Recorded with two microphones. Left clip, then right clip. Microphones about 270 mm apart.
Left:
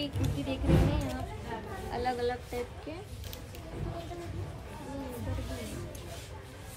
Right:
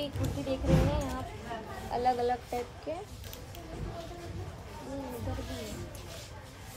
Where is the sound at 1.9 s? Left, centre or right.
Centre.